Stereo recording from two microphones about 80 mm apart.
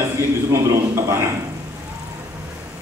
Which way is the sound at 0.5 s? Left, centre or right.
Right.